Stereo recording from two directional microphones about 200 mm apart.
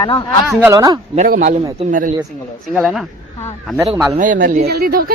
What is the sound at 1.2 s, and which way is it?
Speech, 40° right (ahead or behind).